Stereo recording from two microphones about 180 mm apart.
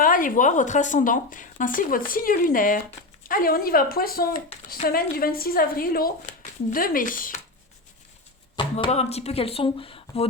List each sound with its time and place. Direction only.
0.0 s a woman's voice: 50° left (ahead or behind)
8.5 s speech: 30° left (ahead or behind)